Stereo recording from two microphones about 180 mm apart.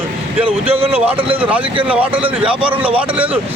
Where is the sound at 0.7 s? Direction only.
30° right (ahead or behind).